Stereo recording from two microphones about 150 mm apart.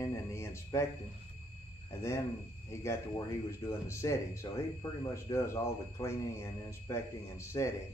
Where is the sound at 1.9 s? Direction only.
20° left (ahead or behind).